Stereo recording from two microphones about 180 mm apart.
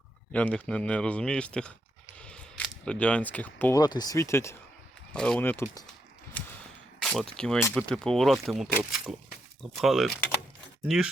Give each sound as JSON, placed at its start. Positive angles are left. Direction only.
{"t": 0.3, "sound": "speech", "side_deg": 5}
{"t": 2.1, "sound": "a sound", "side_deg": 5}
{"t": 3.8, "sound": "speech", "side_deg": 25}
{"t": 5.1, "sound": "speech", "side_deg": 5}
{"t": 6.4, "sound": "a sound", "side_deg": 10}
{"t": 7.3, "sound": "speech", "side_deg": 5}